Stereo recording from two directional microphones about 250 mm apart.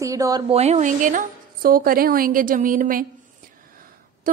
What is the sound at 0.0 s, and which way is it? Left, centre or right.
A woman's voice, centre.